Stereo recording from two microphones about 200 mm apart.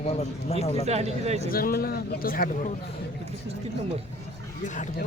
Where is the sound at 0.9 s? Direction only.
30° right (ahead or behind).